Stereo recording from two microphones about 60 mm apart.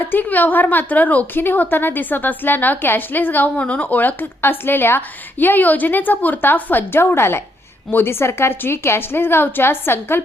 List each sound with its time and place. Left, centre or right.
0.0 s a woman's voice: left